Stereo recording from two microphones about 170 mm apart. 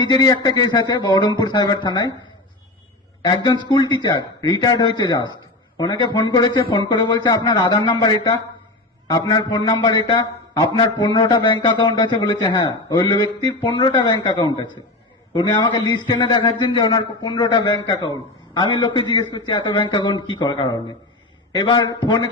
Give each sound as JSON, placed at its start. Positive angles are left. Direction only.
{"t": 0.0, "sound": "a man's voice", "side_deg": 25}
{"t": 3.2, "sound": "a man's voice", "side_deg": 25}